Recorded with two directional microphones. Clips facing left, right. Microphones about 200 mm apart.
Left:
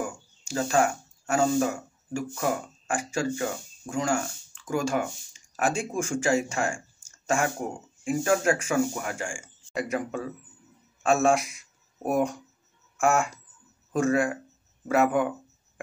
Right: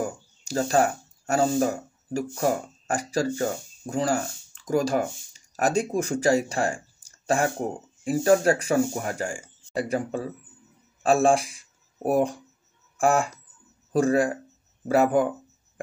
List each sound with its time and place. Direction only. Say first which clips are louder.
0.0 s speech: right 3 dB; 40° right (ahead or behind)